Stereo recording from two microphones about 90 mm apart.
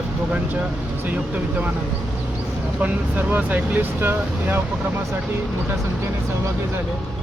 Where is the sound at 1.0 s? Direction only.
20° right (ahead or behind).